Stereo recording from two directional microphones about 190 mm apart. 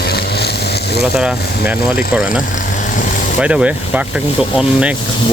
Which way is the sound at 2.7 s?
45° left (ahead or behind).